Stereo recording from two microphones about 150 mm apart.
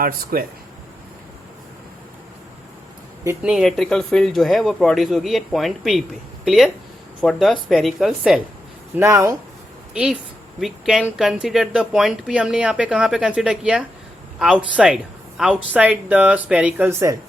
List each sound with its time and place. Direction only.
0.0 s speech: 80° right
3.2 s speech: 5° right (ahead or behind)
9.0 s speech: 20° right (ahead or behind)
9.9 s speech: 5° right (ahead or behind)